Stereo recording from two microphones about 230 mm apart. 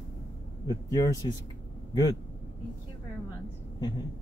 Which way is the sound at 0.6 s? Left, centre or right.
Centre.